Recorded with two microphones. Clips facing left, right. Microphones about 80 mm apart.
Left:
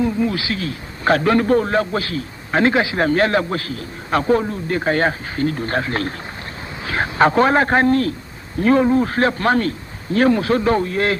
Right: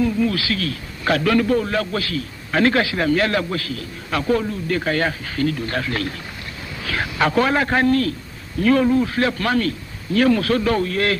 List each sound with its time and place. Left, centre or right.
0.0 s a man's voice: left
3.0 s a man's voice: left